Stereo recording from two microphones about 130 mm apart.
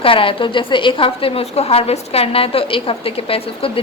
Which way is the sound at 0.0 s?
45° left (ahead or behind).